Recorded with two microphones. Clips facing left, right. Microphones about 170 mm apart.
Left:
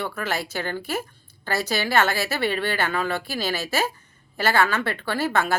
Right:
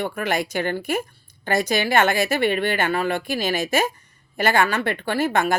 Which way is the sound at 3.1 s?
50° right (ahead or behind).